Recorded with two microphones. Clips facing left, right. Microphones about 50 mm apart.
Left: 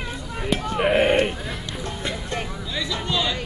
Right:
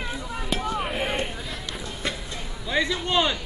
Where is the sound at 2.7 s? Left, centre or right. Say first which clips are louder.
Right 4 dB; right.